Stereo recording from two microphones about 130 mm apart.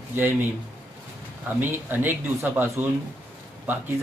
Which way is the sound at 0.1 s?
20° right (ahead or behind).